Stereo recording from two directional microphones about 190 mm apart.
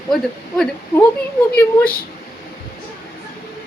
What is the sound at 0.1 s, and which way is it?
Speech, 5° left (ahead or behind).